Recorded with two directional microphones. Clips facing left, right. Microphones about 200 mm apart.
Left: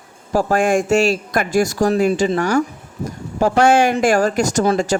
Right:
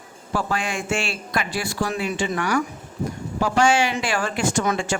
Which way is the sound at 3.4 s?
50° left (ahead or behind).